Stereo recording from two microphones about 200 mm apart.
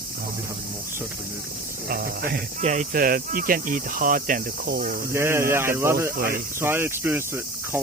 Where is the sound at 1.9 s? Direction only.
50° right (ahead or behind).